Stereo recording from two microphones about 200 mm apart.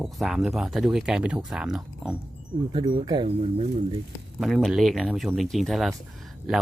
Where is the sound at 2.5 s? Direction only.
20° right (ahead or behind).